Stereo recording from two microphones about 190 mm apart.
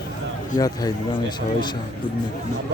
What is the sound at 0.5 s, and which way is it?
Speech, 20° left (ahead or behind).